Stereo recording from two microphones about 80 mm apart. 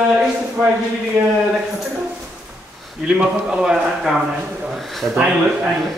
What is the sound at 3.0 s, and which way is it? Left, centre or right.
A man's voice, centre.